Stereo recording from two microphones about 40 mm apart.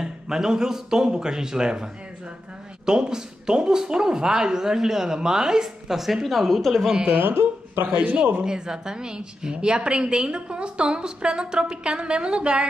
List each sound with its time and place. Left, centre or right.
0.0 s speech: centre
7.1 s speech: right
7.8 s a man's voice: right
8.5 s a woman's voice: centre